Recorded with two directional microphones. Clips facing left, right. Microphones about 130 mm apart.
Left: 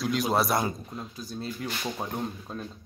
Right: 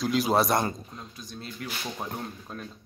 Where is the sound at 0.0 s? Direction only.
Centre (ahead or behind).